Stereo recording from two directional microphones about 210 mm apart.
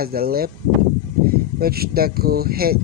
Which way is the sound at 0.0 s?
45° right (ahead or behind).